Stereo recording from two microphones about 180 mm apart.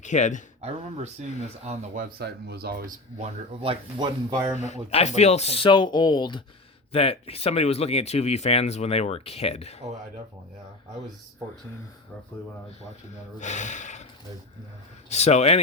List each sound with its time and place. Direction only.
0.0 s speech: 40° left (ahead or behind)
0.6 s speech: 35° right (ahead or behind); by 2.9 s 60° right (ahead or behind)
3.2 s speech: 35° right (ahead or behind)
4.5 s speech: 40° left (ahead or behind)
13.4 s speech: 40° left (ahead or behind)
15.1 s speech: 35° left (ahead or behind)